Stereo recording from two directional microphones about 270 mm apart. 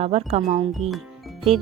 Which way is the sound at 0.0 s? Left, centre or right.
Right.